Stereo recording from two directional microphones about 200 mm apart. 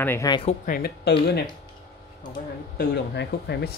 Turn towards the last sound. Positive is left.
turn(degrees=55)  # may be behind; listen again after turning